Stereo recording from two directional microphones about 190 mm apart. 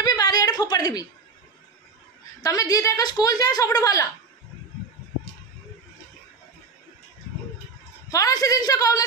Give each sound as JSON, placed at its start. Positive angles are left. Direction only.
{"t": 0.0, "sound": "a sound", "side_deg": 20}
{"t": 2.4, "sound": "a woman's voice", "side_deg": 20}
{"t": 8.1, "sound": "a woman's voice", "side_deg": 20}